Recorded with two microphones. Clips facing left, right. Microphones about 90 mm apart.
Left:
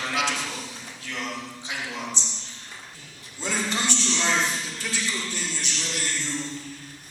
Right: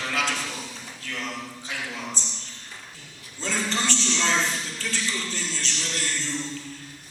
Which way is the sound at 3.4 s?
15° left (ahead or behind).